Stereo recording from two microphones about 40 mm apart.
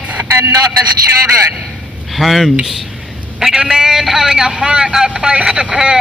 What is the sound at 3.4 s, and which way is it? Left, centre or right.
A man's voice, centre.